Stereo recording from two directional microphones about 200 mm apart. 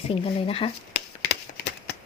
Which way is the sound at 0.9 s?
55° left (ahead or behind).